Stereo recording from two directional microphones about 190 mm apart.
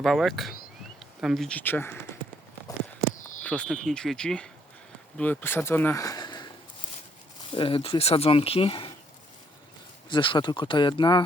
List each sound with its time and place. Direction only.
0.0 s speech: centre (ahead or behind)
3.4 s speech: 5° left (ahead or behind); by 6.5 s 20° left (ahead or behind)
7.5 s speech: 25° left (ahead or behind)
10.1 s speech: 25° left (ahead or behind)